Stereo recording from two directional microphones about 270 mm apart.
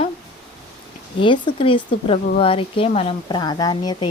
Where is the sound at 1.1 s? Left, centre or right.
Centre.